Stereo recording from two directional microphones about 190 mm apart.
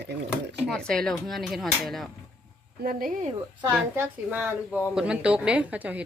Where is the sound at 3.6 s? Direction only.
5° right (ahead or behind).